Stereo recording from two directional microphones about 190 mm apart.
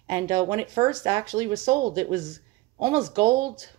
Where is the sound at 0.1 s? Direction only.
20° right (ahead or behind).